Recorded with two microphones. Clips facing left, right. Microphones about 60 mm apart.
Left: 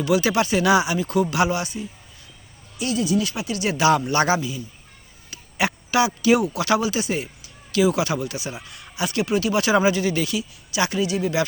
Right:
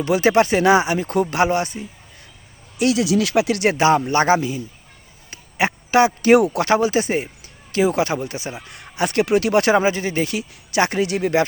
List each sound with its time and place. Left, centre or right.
0.0 s speech: right
2.7 s speech: right
3.8 s speech: right
6.7 s speech: right
8.6 s speech: right
9.7 s speech: right
10.3 s speech: right